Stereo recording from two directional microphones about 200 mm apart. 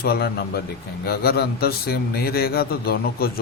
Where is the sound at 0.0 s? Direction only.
50° left (ahead or behind).